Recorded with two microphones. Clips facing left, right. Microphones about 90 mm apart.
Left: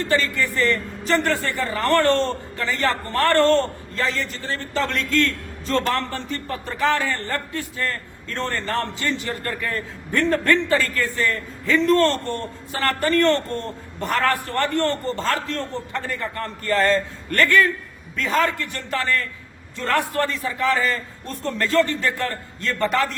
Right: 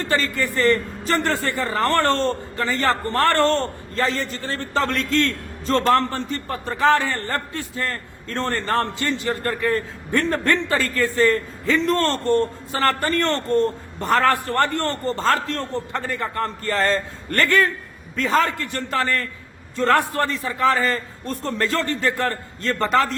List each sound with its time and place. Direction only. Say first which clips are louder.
0.1 s a man's voice: even; 35° right (ahead or behind)